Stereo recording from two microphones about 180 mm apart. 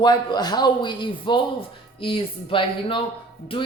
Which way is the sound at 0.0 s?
25° left (ahead or behind).